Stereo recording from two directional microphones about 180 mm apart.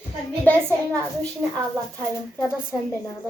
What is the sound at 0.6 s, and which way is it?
Speech, 15° right (ahead or behind).